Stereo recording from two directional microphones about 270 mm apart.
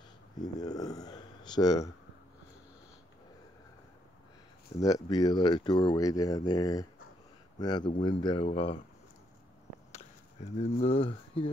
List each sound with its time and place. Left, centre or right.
0.4 s speech: centre
4.7 s speech: centre
9.9 s speech: left